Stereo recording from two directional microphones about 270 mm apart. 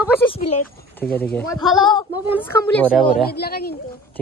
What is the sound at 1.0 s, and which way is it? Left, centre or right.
Speech, centre.